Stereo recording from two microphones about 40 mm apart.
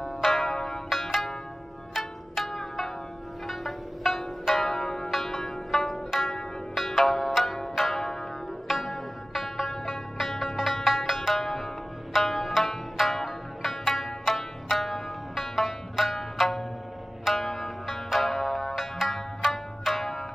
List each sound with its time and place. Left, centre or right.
0.2 s zither: centre
0.5 s zither: centre
0.8 s zither: centre
3.4 s music: centre
4.5 s zither: centre
4.7 s zither: centre
5.1 s zither: centre
6.7 s zither: centre
8.6 s music: centre
13.0 s zither: centre
17.8 s music: centre
18.8 s music: centre
19.1 s music: centre